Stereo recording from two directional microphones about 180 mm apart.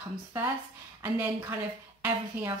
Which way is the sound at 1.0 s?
10° right (ahead or behind).